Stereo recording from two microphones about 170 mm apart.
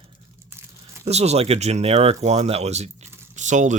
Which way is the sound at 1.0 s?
40° right (ahead or behind).